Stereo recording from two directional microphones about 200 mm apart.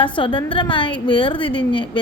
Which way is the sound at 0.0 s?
25° left (ahead or behind).